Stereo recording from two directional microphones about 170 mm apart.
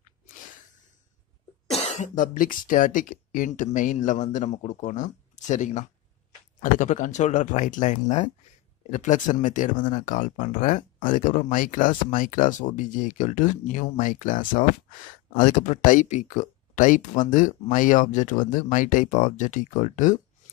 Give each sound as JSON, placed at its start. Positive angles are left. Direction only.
{"t": 1.7, "sound": "speech", "side_deg": 40}